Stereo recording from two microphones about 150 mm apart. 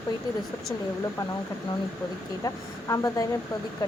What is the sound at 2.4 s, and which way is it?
Speech, 25° left (ahead or behind).